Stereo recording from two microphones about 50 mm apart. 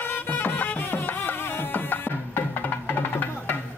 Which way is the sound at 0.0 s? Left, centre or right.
Left.